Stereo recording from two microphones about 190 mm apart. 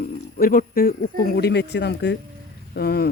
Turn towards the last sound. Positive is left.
turn(degrees=55)  # may be behind; listen again after turning